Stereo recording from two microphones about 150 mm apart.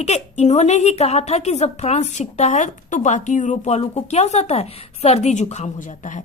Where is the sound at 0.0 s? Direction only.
50° left (ahead or behind).